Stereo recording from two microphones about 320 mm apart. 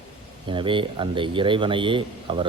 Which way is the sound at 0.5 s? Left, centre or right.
Centre.